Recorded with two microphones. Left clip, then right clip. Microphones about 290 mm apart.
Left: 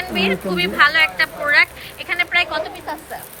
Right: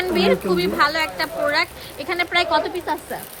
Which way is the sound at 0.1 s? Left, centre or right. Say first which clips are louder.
Right 1 dB; right.